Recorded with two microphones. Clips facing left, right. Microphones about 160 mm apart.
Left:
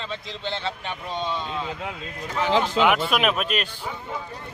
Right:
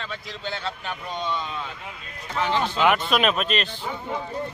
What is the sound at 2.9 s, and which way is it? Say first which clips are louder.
Speech: even; 10° left (ahead or behind).